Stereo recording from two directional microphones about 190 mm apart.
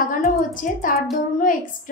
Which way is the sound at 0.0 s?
45° left (ahead or behind).